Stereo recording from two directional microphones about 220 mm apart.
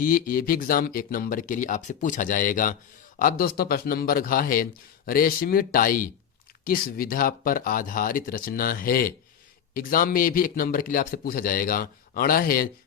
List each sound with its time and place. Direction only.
0.0 s a man's voice: 40° left (ahead or behind)